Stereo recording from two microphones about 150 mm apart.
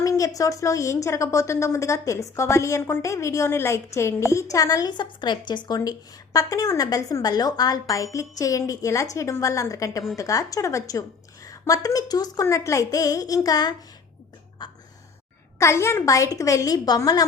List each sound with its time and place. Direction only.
0.0 s a woman's voice: 20° left (ahead or behind)
14.6 s gasp: 30° left (ahead or behind)
15.5 s a woman's voice: 20° left (ahead or behind)